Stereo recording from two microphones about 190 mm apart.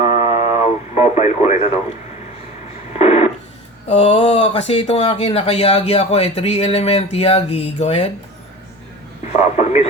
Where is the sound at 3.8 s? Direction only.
35° left (ahead or behind).